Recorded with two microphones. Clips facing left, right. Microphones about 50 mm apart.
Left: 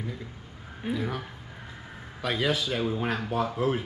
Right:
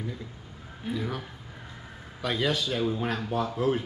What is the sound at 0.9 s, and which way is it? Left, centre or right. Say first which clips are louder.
Speech: left 1 dB; centre.